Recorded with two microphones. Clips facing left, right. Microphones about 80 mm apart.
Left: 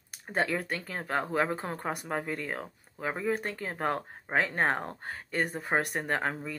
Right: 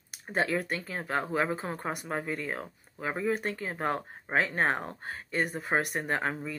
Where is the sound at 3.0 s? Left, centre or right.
Right.